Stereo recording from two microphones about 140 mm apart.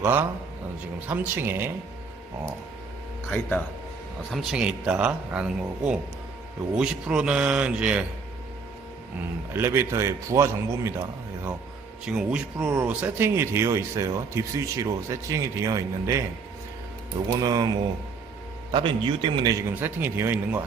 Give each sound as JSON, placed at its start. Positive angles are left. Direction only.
{"t": 0.0, "sound": "a man's voice", "side_deg": -15}
{"t": 3.2, "sound": "speech", "side_deg": 10}
{"t": 4.3, "sound": "a man's voice", "side_deg": 0}
{"t": 9.5, "sound": "speech", "side_deg": -20}
{"t": 12.0, "sound": "speech", "side_deg": -5}
{"t": 17.3, "sound": "speech", "side_deg": -30}
{"t": 18.7, "sound": "speech", "side_deg": -40}